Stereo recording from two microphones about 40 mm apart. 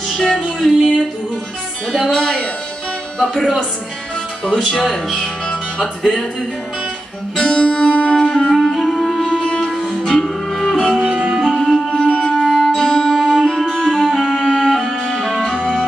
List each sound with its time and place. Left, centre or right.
0.1 s music: centre
1.9 s speech: centre
4.9 s speech: centre
7.3 s music: centre
10.0 s music: centre